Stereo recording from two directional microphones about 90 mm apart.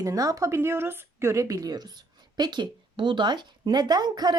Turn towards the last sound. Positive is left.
turn(degrees=-50)  # may be behind; listen again after turning